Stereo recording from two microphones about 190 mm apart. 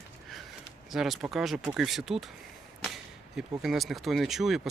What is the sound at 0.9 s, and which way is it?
Speech, centre (ahead or behind).